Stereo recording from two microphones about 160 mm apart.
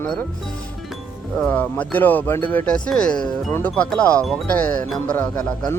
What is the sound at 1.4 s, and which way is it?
Speech, 10° left (ahead or behind).